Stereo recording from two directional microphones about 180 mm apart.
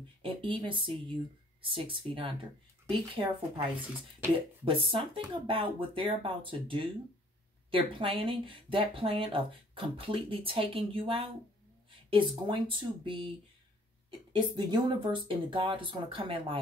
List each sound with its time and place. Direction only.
0.2 s speech: 30° right (ahead or behind)
4.9 s speech: 30° right (ahead or behind)
14.3 s speech: 25° right (ahead or behind)